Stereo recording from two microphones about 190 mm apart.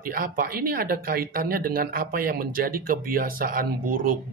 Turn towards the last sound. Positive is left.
turn(degrees=-50)  # may be behind; listen again after turning